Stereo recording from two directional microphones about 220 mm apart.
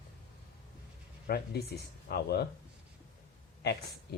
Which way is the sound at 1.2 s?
45° left (ahead or behind).